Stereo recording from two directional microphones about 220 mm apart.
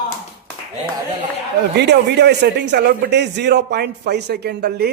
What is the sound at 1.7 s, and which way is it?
A man's voice, 50° right (ahead or behind).